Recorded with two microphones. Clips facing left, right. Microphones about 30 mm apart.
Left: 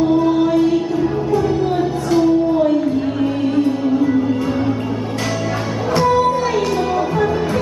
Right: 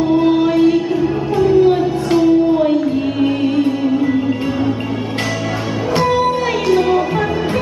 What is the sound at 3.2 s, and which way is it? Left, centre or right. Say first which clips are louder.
Music: right 2 dB; right.